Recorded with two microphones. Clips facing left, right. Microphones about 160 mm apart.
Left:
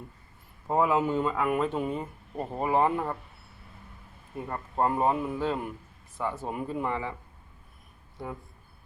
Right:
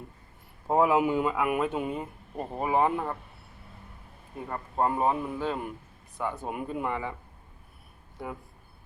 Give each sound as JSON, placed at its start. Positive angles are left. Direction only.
{"t": 0.7, "sound": "speech", "side_deg": -15}
{"t": 4.4, "sound": "speech", "side_deg": 0}